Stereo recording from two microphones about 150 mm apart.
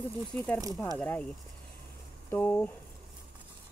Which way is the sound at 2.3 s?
10° left (ahead or behind).